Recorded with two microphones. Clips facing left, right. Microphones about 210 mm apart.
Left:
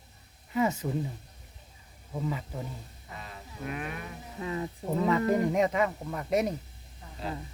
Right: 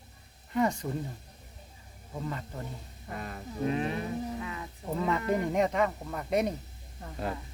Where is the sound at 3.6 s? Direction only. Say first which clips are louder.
Right 6 dB; 30° right (ahead or behind).